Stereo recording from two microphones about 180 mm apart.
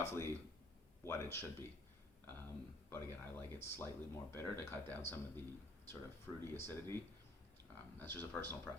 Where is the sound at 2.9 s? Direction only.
15° left (ahead or behind).